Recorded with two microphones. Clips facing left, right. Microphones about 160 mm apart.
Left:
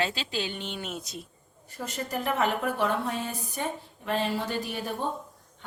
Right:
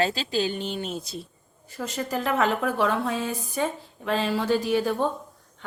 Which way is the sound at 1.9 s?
90° right.